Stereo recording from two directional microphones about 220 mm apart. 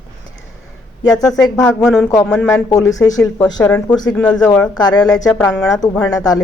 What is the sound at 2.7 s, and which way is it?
Speech, 15° left (ahead or behind).